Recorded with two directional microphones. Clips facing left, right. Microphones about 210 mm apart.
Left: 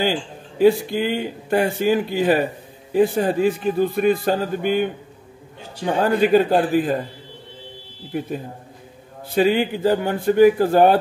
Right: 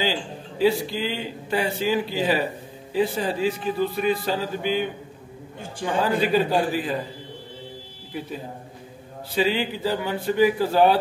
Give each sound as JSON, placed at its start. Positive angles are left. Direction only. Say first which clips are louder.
{"t": 0.0, "sound": "a man's voice", "louder": "left 4 dB", "side_deg": 50}
{"t": 5.9, "sound": "a man's voice", "louder": "left 5 dB", "side_deg": 50}
{"t": 8.1, "sound": "a man's voice", "louder": "left 6 dB", "side_deg": 50}